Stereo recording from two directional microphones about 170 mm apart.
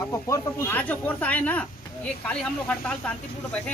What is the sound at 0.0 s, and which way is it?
Speech, 20° left (ahead or behind).